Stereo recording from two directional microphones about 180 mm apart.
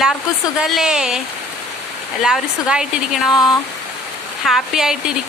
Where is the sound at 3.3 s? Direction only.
20° left (ahead or behind).